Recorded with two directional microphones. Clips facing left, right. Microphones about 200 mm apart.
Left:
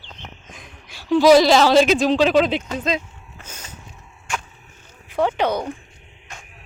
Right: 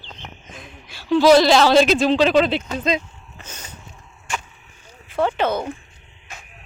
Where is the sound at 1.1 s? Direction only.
10° left (ahead or behind).